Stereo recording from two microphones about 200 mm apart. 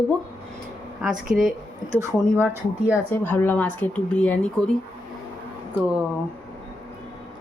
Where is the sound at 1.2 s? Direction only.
45° right (ahead or behind).